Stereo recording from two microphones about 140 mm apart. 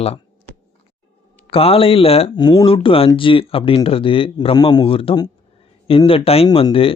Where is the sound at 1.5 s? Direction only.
40° left (ahead or behind).